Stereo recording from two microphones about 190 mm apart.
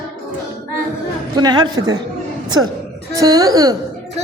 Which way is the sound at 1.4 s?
20° right (ahead or behind).